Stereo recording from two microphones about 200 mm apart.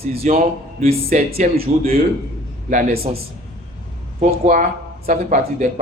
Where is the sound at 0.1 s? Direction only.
30° right (ahead or behind).